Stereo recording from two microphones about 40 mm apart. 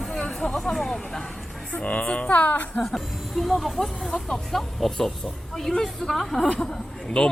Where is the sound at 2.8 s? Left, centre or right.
Centre.